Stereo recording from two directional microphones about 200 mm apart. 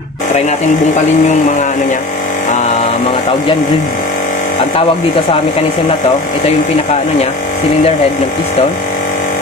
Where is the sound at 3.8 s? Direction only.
45° left (ahead or behind).